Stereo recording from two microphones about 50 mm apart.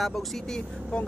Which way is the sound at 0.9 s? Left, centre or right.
Centre.